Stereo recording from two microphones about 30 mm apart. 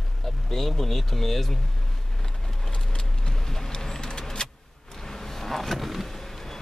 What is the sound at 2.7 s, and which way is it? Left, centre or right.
Vehicle, left.